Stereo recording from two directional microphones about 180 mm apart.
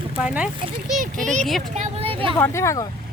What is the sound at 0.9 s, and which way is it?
Speech, 45° right (ahead or behind).